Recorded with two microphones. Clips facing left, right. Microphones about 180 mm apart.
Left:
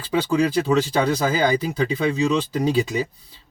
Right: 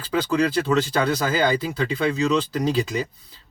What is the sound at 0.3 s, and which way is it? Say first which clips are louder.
Speech: left 1 dB; 10° left (ahead or behind).